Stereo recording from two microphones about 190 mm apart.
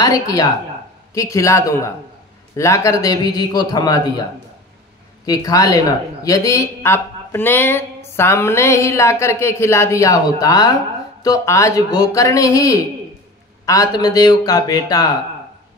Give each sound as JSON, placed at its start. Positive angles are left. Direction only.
{"t": 0.0, "sound": "a man's voice", "side_deg": 20}
{"t": 5.2, "sound": "a woman's voice", "side_deg": 20}